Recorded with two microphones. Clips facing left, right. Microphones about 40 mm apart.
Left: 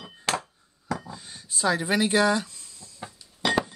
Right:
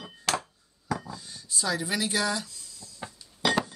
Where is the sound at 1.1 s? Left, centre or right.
Left.